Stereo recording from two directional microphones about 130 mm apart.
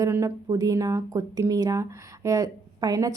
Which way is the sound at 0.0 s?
20° right (ahead or behind).